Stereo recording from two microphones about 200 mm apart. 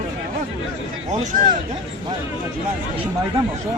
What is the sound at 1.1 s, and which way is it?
Speech, 40° right (ahead or behind).